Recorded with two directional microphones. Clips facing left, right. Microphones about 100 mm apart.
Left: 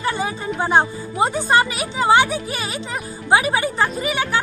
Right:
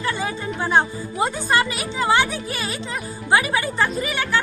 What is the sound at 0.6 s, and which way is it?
Speech, 25° left (ahead or behind).